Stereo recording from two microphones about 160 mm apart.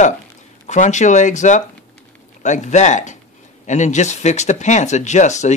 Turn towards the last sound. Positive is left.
turn(degrees=45)  # may be behind; listen again after turning